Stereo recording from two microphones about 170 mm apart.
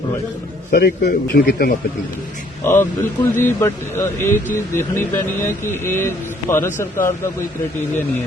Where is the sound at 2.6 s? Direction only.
15° left (ahead or behind).